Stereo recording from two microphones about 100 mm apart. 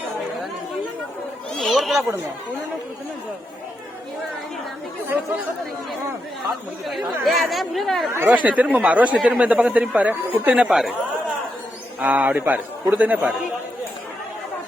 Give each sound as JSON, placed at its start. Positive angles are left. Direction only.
{"t": 1.5, "sound": "a sound", "side_deg": 0}
{"t": 6.8, "sound": "speech", "side_deg": 0}
{"t": 8.1, "sound": "speech", "side_deg": -20}
{"t": 11.9, "sound": "speech", "side_deg": -15}